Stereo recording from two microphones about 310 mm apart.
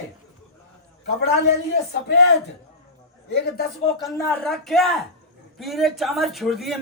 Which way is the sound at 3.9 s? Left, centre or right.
Centre.